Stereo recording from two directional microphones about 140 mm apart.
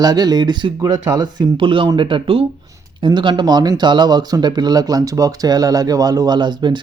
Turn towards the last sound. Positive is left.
turn(degrees=-30)  # may be behind; listen again after turning